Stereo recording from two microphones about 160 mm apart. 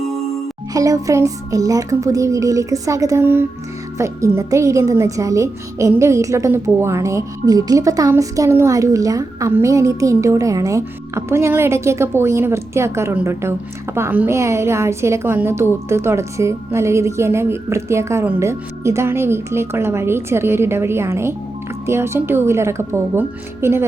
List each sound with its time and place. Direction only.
0.7 s a woman's voice: 20° right (ahead or behind)